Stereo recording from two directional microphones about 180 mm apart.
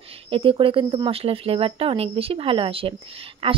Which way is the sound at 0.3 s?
30° right (ahead or behind).